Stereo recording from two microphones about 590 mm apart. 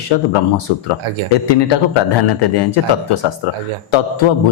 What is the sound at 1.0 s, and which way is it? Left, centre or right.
Speech, right.